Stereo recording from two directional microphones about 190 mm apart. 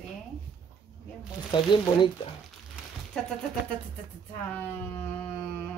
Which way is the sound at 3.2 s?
5° left (ahead or behind).